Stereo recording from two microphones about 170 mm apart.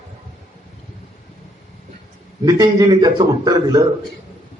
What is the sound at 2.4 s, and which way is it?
A man's voice, 25° right (ahead or behind).